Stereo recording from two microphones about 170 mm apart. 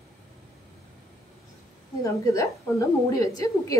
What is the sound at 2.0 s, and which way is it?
A woman's voice, 20° left (ahead or behind).